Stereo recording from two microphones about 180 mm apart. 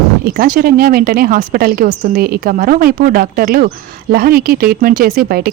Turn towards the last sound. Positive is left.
turn(degrees=-55)  # may be behind; listen again after turning